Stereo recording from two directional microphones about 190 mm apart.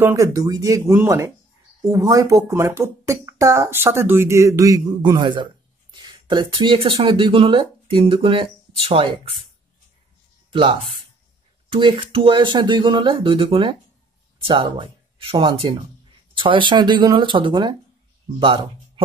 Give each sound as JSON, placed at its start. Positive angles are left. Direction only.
{"t": 0.0, "sound": "speech", "side_deg": -15}
{"t": 10.5, "sound": "speech", "side_deg": -25}